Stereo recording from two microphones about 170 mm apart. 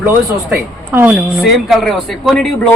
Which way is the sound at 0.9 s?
10° right (ahead or behind).